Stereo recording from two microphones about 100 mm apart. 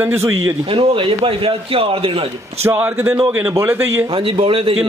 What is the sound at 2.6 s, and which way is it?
A man's voice, 20° right (ahead or behind).